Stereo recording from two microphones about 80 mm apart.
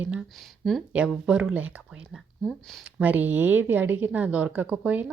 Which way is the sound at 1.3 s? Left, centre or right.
Centre.